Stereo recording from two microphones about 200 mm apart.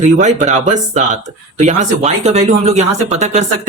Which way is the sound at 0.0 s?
35° right (ahead or behind).